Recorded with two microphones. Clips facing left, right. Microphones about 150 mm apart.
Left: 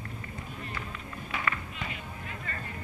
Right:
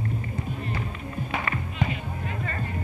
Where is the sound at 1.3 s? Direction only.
25° right (ahead or behind).